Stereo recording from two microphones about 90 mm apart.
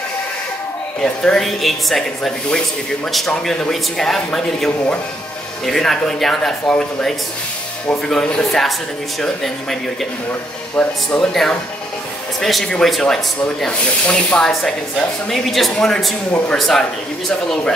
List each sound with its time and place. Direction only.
1.0 s speech: 10° left (ahead or behind)
5.7 s speech: 5° left (ahead or behind)
10.8 s speech: 15° left (ahead or behind)
12.4 s speech: 5° left (ahead or behind)
16.3 s a man's voice: 20° left (ahead or behind)
16.5 s speech: 5° left (ahead or behind)